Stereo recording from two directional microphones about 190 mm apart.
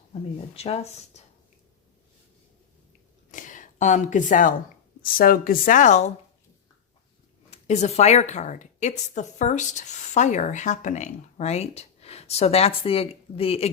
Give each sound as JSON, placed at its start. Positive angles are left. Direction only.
{"t": 0.1, "sound": "a woman's voice", "side_deg": 35}
{"t": 3.3, "sound": "speech", "side_deg": 40}
{"t": 7.5, "sound": "a woman's voice", "side_deg": 35}